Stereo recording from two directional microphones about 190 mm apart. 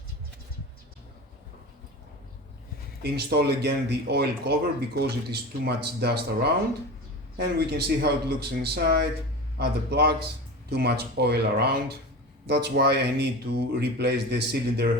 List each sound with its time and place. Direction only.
3.0 s speech: 60° right (ahead or behind)